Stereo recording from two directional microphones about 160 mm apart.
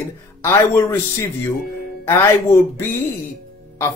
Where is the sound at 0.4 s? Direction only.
15° left (ahead or behind).